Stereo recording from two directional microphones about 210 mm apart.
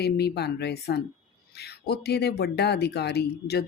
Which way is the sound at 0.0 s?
50° left (ahead or behind).